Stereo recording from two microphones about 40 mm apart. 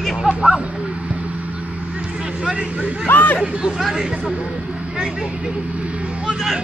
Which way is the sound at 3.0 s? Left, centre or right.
Left.